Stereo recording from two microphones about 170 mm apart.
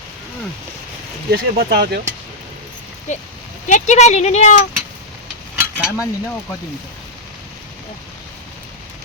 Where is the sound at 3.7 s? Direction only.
45° left (ahead or behind).